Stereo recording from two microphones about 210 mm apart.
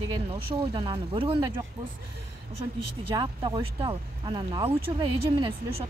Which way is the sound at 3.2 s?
20° right (ahead or behind).